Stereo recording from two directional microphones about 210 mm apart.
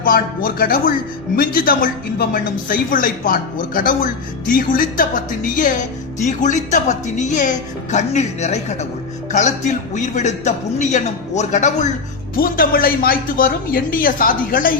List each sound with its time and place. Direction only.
0.0 s a woman's voice: 40° left (ahead or behind)